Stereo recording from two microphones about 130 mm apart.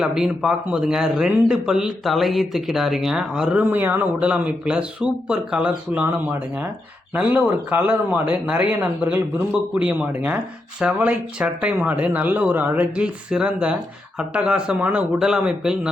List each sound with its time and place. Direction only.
0.0 s speech: 5° right (ahead or behind)